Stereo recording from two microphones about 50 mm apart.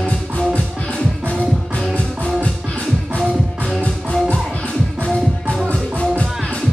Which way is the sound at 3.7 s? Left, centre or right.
Centre.